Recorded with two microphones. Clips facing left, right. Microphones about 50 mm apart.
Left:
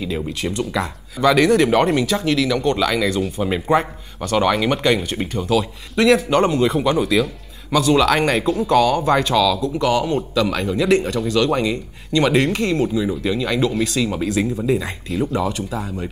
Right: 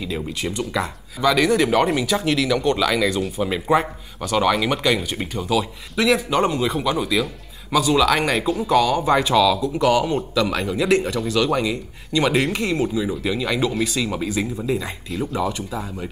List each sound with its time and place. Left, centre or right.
0.4 s speech: centre
1.2 s speech: centre
2.0 s speech: centre